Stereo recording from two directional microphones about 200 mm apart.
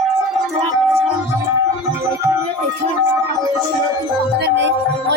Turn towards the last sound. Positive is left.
turn(degrees=-65)  # may be behind; listen again after turning